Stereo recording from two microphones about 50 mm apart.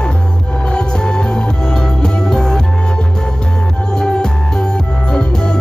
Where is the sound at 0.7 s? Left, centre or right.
Centre.